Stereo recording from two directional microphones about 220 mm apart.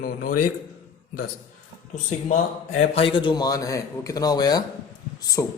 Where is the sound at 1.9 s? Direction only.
35° left (ahead or behind); by 5.5 s 10° left (ahead or behind).